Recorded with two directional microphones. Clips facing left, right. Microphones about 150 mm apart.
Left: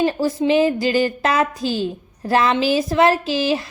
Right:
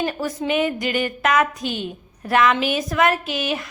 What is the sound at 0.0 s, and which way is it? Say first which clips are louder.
A woman's voice: left 6 dB; 30° left (ahead or behind).